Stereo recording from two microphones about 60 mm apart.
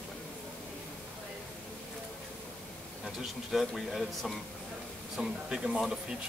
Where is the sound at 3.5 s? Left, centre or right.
Centre.